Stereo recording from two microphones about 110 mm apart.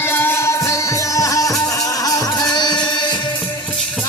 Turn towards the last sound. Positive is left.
turn(degrees=45)  # may be behind; listen again after turning